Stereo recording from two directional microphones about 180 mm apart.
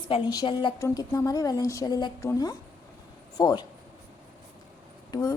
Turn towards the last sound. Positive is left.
turn(degrees=20)  # may be behind; listen again after turning